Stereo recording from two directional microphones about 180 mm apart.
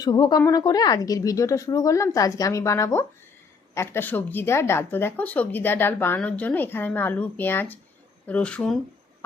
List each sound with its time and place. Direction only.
0.0 s a woman's voice: 20° left (ahead or behind); by 8.8 s 5° left (ahead or behind)